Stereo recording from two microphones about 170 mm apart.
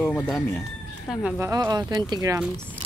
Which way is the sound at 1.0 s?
5° right (ahead or behind).